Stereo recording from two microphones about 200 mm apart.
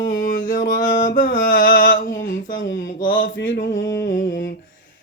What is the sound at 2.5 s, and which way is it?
Speech, 70° left (ahead or behind).